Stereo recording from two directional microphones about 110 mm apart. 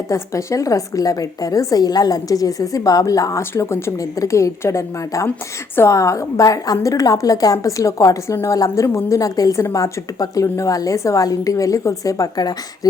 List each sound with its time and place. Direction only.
0.1 s a woman's voice: 30° left (ahead or behind)